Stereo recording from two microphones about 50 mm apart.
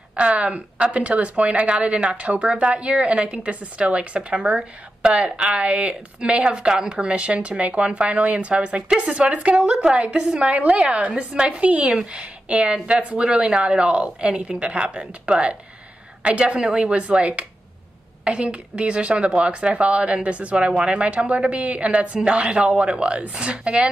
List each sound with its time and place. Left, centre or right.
0.1 s a woman's voice: right